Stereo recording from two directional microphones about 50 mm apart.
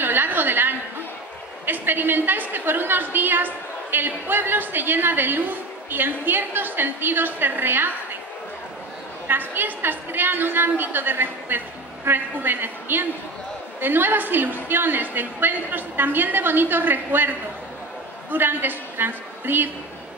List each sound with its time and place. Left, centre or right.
0.0 s a sound: right
1.7 s a woman's voice: right
9.3 s a woman's voice: right